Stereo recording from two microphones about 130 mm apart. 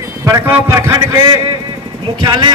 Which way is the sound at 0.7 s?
25° right (ahead or behind).